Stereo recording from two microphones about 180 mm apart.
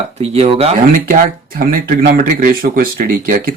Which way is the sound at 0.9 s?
50° right (ahead or behind).